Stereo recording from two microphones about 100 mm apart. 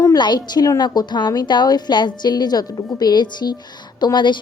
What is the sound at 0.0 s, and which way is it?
A woman's voice, 45° left (ahead or behind).